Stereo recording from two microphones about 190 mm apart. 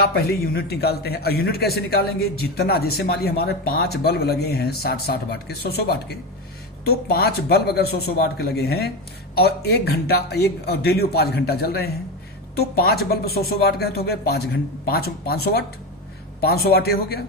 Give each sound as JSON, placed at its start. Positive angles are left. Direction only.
{"t": 0.0, "sound": "a man's voice", "side_deg": 55}